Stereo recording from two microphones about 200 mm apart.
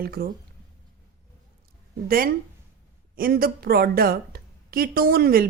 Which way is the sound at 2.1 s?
45° right (ahead or behind).